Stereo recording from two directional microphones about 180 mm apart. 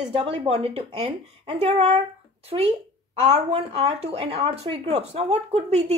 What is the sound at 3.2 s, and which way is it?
Speech, 35° right (ahead or behind).